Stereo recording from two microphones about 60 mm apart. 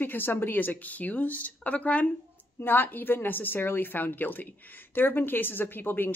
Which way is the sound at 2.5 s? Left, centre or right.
Left.